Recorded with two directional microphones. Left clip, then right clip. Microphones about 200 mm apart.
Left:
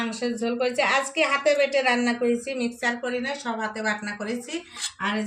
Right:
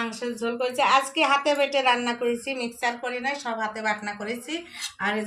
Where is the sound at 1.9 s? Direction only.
25° left (ahead or behind).